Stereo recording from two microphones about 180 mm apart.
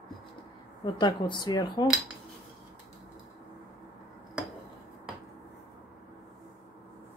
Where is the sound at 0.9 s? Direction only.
25° left (ahead or behind).